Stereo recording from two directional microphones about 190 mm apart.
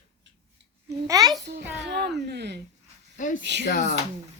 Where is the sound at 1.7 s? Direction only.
65° right (ahead or behind).